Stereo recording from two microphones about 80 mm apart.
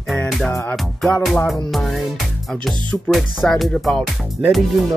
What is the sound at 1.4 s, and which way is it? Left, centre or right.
Speech, centre.